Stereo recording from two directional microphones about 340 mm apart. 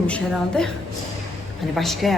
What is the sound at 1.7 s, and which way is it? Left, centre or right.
Speech, centre.